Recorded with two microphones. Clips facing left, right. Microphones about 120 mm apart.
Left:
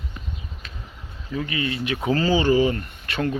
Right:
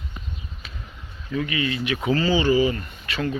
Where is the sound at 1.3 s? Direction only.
30° left (ahead or behind).